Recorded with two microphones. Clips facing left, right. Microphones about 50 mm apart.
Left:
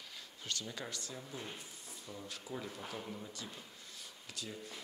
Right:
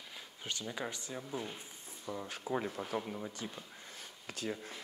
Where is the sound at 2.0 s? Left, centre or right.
Right.